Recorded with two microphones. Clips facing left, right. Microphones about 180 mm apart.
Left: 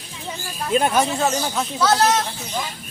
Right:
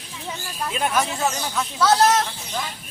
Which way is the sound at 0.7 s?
35° left (ahead or behind).